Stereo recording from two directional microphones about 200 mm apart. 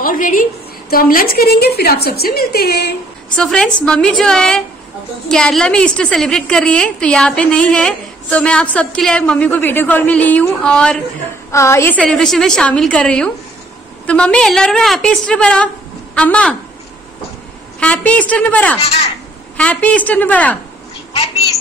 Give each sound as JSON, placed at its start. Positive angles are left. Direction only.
{"t": 0.0, "sound": "a woman's voice", "side_deg": 45}
{"t": 3.3, "sound": "a woman's voice", "side_deg": 5}
{"t": 17.7, "sound": "a woman's voice", "side_deg": 5}
{"t": 18.8, "sound": "speech", "side_deg": 30}
{"t": 19.5, "sound": "a woman's voice", "side_deg": 5}